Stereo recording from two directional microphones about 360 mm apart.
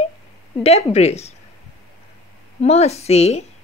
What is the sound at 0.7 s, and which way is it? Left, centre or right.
Speech, centre.